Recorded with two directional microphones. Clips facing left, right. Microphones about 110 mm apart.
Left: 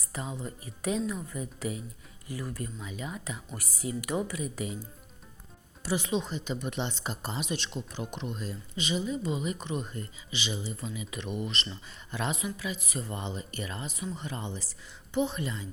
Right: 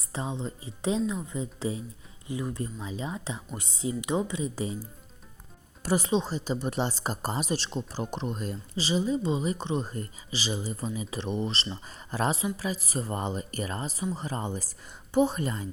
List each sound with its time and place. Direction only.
0.0 s speech: 25° right (ahead or behind)
5.8 s speech: 45° right (ahead or behind)
6.1 s speech: 35° right (ahead or behind)
8.7 s speech: 30° right (ahead or behind)